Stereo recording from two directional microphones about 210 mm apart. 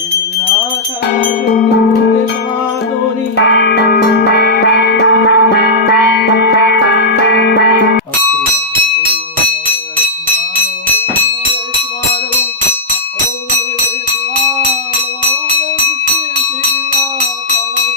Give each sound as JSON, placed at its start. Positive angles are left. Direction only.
{"t": 3.3, "sound": "music", "side_deg": 50}